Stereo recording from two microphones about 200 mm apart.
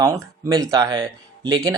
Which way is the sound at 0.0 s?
15° right (ahead or behind).